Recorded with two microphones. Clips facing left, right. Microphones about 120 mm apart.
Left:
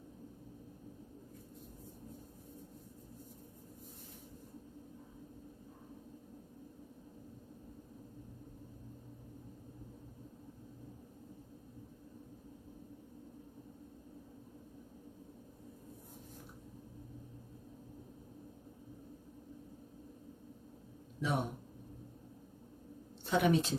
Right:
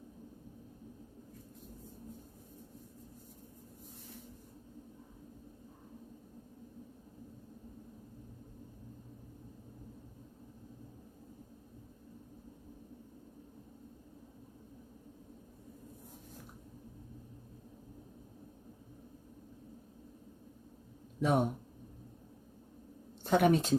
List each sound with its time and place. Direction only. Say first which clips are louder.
21.2 s speech: right 6 dB; 45° right (ahead or behind)
23.2 s speech: right 3 dB; 45° right (ahead or behind)